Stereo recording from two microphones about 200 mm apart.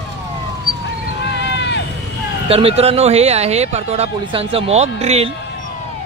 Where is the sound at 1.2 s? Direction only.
60° left (ahead or behind).